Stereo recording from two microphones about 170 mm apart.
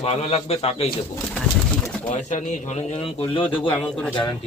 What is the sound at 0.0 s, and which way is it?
Speech, 35° left (ahead or behind).